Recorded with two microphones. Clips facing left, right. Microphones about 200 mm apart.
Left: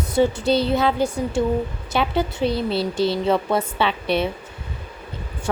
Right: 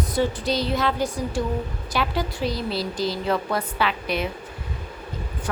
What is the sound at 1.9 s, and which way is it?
A woman's voice, 25° left (ahead or behind).